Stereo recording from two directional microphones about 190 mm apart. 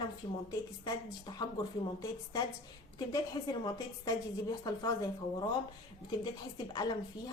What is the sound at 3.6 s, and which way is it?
A woman's voice, 20° left (ahead or behind).